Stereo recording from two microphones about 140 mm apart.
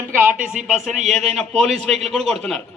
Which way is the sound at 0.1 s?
15° right (ahead or behind).